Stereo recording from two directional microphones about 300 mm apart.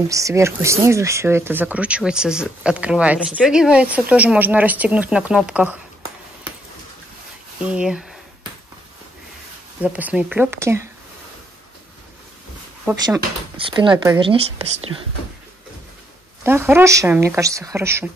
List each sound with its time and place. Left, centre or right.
0.1 s speech: centre
7.6 s speech: centre
9.8 s speech: centre
12.8 s speech: centre
16.4 s speech: centre